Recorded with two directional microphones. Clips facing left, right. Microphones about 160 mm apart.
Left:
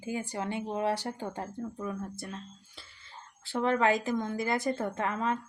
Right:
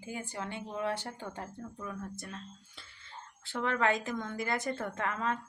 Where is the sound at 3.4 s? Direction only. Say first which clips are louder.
Left 4 dB; 35° left (ahead or behind).